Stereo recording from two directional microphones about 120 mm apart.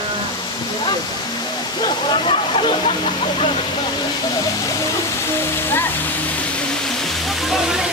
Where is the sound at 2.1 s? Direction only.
45° left (ahead or behind).